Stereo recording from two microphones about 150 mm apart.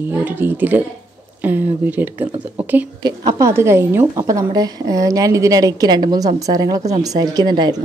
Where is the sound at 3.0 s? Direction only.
25° right (ahead or behind).